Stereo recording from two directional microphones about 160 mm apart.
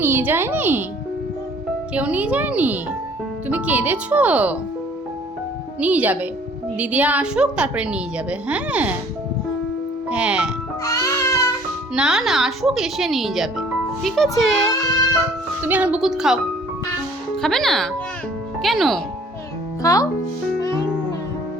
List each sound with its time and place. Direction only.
0.0 s a woman's voice: 15° right (ahead or behind)
1.9 s a woman's voice: 10° right (ahead or behind)
5.8 s a woman's voice: 10° right (ahead or behind)
10.1 s a woman's voice: 5° right (ahead or behind)
10.8 s music: 20° left (ahead or behind)
11.9 s speech: 5° right (ahead or behind)
15.6 s speech: 10° right (ahead or behind)
17.4 s speech: centre (ahead or behind)
19.8 s speech: 20° left (ahead or behind)